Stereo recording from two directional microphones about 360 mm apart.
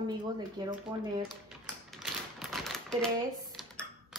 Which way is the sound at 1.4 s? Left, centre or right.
Centre.